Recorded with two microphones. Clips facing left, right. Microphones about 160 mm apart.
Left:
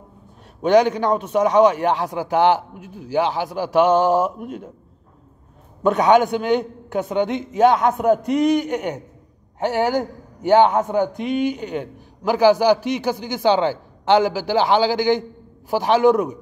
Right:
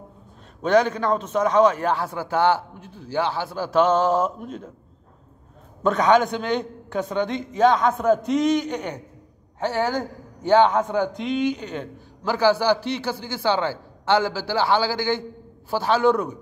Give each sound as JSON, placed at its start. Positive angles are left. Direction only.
{"t": 0.6, "sound": "a man's voice", "side_deg": 15}
{"t": 5.8, "sound": "a man's voice", "side_deg": 15}